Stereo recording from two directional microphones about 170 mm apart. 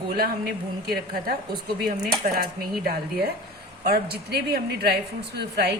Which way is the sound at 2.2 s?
60° right (ahead or behind).